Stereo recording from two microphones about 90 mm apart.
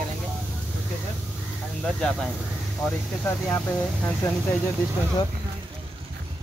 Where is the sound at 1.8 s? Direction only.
5° left (ahead or behind).